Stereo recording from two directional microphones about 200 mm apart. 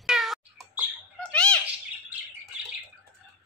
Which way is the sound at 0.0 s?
Centre (ahead or behind).